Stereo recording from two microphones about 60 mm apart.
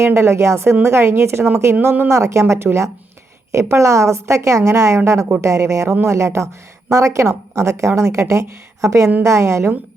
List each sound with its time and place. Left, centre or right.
0.0 s a woman's voice: right
2.0 s a woman's voice: right